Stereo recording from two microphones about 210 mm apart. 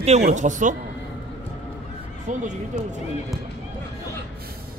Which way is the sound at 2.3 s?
35° right (ahead or behind).